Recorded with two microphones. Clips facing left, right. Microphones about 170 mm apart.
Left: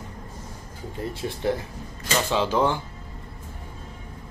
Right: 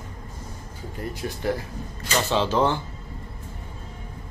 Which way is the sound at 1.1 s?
20° left (ahead or behind).